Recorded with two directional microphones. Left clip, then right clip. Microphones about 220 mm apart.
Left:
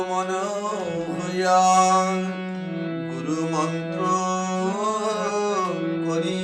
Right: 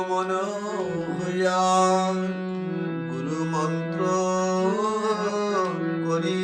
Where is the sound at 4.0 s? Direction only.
10° right (ahead or behind).